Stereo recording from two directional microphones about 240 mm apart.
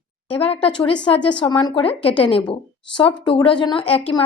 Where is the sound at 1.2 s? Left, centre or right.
Centre.